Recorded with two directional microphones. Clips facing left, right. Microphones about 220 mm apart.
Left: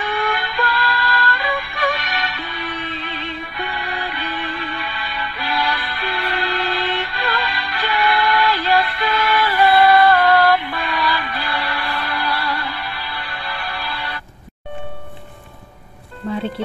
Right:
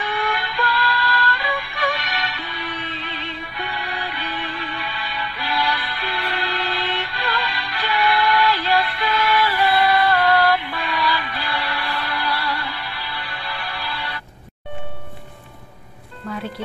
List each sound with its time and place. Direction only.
0.0 s music: 50° left (ahead or behind)
16.3 s music: 30° left (ahead or behind)